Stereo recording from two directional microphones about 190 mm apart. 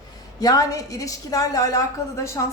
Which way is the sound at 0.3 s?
20° left (ahead or behind).